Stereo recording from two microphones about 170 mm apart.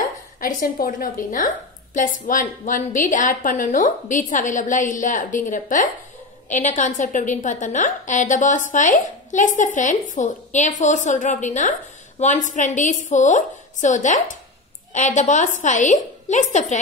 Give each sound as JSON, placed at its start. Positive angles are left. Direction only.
{"t": 0.4, "sound": "a woman's voice", "side_deg": 55}